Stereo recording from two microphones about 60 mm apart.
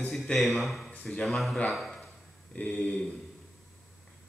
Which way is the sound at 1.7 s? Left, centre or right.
Centre.